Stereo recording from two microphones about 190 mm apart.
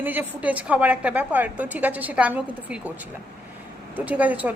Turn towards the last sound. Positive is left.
turn(degrees=-10)  # may be behind; listen again after turning